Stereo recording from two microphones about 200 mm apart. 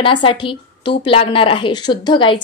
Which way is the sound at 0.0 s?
25° left (ahead or behind).